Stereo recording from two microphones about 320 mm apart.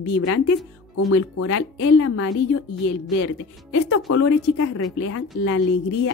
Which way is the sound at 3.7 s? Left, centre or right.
Left.